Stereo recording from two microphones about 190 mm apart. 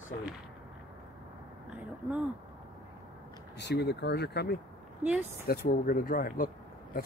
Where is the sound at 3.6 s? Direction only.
60° left (ahead or behind).